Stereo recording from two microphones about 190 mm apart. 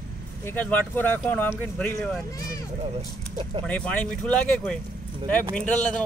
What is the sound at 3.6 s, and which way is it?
Speech, 5° left (ahead or behind).